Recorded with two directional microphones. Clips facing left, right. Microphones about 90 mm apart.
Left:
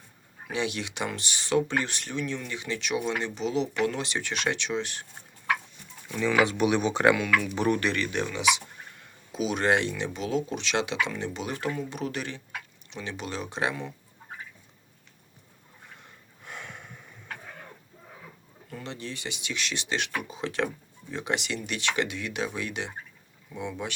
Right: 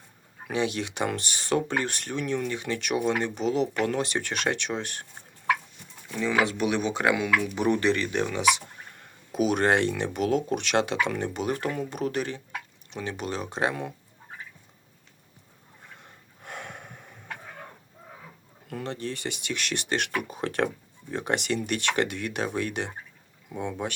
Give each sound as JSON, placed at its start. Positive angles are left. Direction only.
{"t": 0.5, "sound": "speech", "side_deg": -40}
{"t": 6.1, "sound": "speech", "side_deg": 0}
{"t": 7.8, "sound": "speech", "side_deg": -25}
{"t": 8.3, "sound": "speech", "side_deg": -45}
{"t": 16.4, "sound": "snort", "side_deg": -50}
{"t": 18.7, "sound": "speech", "side_deg": -50}